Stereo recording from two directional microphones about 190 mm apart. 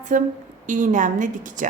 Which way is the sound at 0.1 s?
40° right (ahead or behind).